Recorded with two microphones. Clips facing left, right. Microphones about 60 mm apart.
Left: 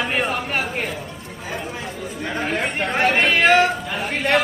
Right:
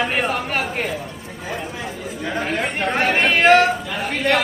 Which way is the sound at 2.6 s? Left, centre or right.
Centre.